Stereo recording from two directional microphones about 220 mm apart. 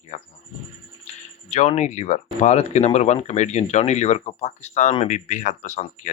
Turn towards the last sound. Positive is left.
turn(degrees=35)  # may be behind; listen again after turning